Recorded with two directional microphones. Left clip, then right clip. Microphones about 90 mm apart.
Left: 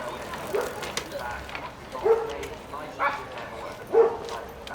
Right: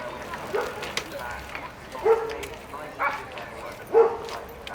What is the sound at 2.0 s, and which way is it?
Dog, 25° right (ahead or behind).